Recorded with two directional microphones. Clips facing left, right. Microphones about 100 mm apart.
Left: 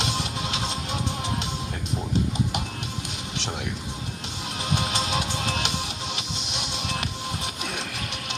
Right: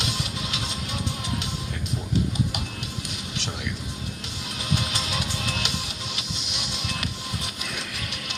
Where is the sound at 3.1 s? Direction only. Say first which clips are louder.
Left 1 dB; 30° left (ahead or behind).